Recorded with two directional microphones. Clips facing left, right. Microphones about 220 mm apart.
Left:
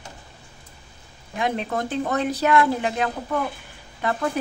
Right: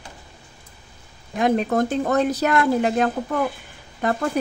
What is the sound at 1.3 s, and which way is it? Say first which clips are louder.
Speech: right 6 dB; 45° right (ahead or behind).